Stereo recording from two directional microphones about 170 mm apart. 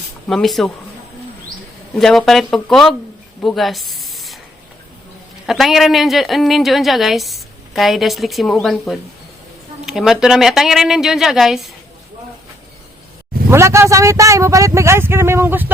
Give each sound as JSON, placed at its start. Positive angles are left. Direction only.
{"t": 0.3, "sound": "a woman's voice", "side_deg": 0}
{"t": 2.0, "sound": "a woman's voice", "side_deg": 0}
{"t": 3.4, "sound": "a sound", "side_deg": 0}
{"t": 5.5, "sound": "a woman's voice", "side_deg": 0}
{"t": 13.5, "sound": "speech", "side_deg": -15}